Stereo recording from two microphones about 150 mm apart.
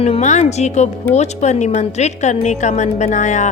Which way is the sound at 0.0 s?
50° left (ahead or behind).